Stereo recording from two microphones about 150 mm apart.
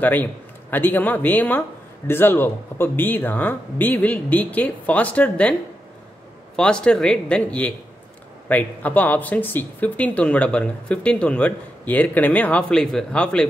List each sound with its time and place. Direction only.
0.0 s speech: 10° left (ahead or behind)